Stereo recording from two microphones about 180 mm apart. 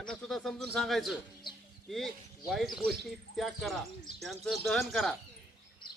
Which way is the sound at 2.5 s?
Centre (ahead or behind).